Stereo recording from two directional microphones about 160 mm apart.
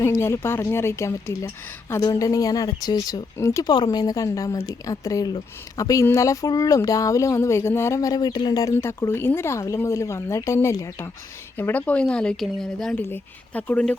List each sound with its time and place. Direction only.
0.0 s speech: 15° left (ahead or behind)